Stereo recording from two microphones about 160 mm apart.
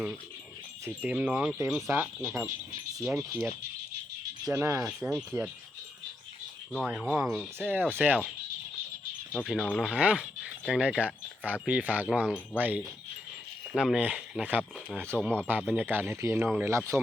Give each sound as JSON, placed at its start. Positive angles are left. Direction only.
{"t": 0.9, "sound": "speech", "side_deg": -5}
{"t": 4.5, "sound": "speech", "side_deg": -15}
{"t": 4.9, "sound": "speech", "side_deg": -5}
{"t": 6.8, "sound": "speech", "side_deg": -5}
{"t": 9.3, "sound": "speech", "side_deg": 5}